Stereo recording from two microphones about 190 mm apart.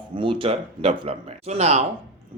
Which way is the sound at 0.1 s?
25° right (ahead or behind).